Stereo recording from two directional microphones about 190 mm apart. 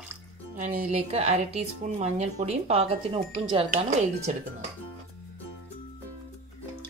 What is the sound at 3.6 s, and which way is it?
Speech, 40° right (ahead or behind).